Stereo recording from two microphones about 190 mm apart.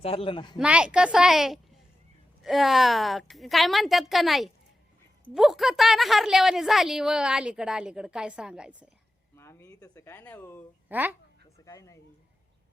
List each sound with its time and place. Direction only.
0.0 s speech: 30° left (ahead or behind)
0.6 s a woman's voice: 5° right (ahead or behind)
9.3 s speech: 15° left (ahead or behind)
10.8 s a woman's voice: 10° right (ahead or behind)
11.6 s speech: 15° left (ahead or behind)